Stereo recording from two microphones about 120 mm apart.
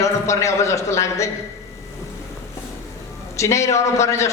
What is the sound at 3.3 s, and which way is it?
Speech, 25° left (ahead or behind).